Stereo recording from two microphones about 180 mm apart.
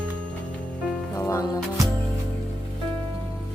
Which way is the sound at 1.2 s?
15° left (ahead or behind).